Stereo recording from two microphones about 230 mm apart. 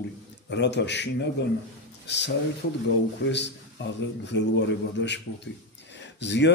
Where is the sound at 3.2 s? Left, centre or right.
Left.